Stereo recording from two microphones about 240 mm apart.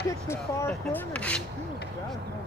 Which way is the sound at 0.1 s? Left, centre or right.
Centre.